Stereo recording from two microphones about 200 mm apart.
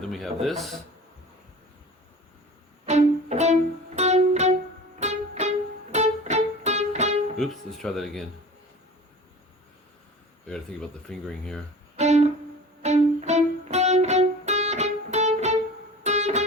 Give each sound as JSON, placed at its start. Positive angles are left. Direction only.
{"t": 0.0, "sound": "a man's voice", "side_deg": 0}
{"t": 2.8, "sound": "music", "side_deg": -35}
{"t": 7.3, "sound": "speech", "side_deg": 0}
{"t": 10.5, "sound": "speech", "side_deg": 5}
{"t": 11.9, "sound": "music", "side_deg": -35}